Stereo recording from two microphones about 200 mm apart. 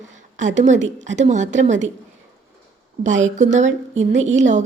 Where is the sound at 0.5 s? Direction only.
35° right (ahead or behind).